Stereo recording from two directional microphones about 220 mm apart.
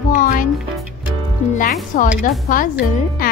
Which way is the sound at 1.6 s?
40° left (ahead or behind).